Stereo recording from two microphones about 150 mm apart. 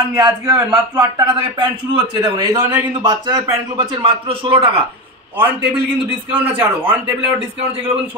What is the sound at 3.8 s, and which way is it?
Speech, 35° right (ahead or behind).